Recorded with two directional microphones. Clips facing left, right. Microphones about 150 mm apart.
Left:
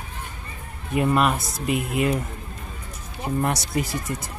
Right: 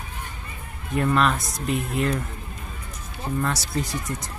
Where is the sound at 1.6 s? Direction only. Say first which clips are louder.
Left 1 dB; 65° left (ahead or behind).